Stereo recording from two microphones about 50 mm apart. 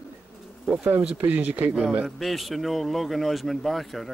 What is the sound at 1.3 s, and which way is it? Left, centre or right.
Speech, right.